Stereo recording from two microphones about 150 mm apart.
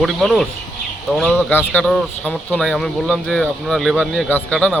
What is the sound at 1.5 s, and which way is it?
Speech, 10° left (ahead or behind).